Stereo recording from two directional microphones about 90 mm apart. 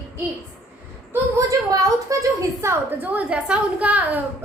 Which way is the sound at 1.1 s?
35° right (ahead or behind).